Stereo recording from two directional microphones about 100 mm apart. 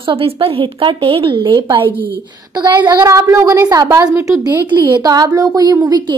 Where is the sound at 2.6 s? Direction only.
45° right (ahead or behind).